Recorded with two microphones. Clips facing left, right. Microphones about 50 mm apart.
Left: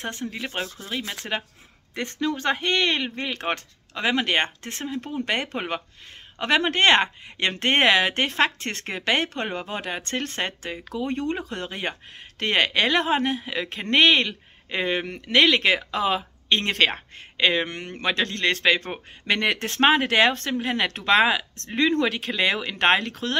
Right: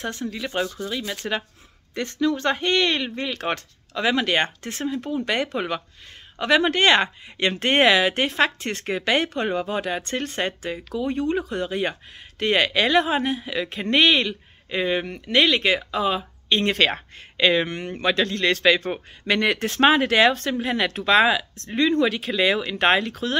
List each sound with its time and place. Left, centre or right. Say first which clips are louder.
0.0 s speech: right 2 dB; left
2.4 s speech: right 1 dB; centre
2.7 s speech: right 2 dB; left
15.0 s speech: right 1 dB; left
15.3 s speech: even; left
16.4 s speech: right 1 dB; left
17.9 s speech: right 3 dB; left
22.0 s speech: right 2 dB; left